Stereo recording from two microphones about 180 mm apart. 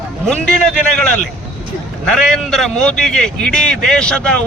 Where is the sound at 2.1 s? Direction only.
Centre (ahead or behind).